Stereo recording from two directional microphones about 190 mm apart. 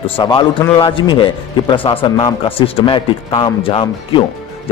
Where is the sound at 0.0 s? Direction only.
25° left (ahead or behind).